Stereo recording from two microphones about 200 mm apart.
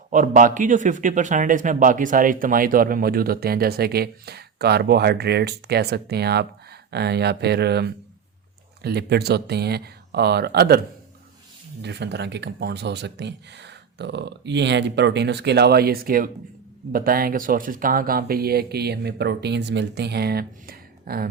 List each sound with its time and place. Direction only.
0.1 s a man's voice: 40° right (ahead or behind)
11.8 s a man's voice: 60° right (ahead or behind)